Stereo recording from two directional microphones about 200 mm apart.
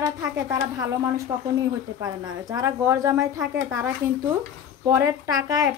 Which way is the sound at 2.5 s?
15° right (ahead or behind).